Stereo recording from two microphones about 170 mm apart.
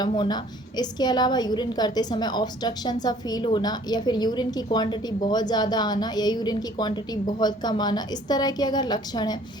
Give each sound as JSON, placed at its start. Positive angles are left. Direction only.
{"t": 0.1, "sound": "a woman's voice", "side_deg": 25}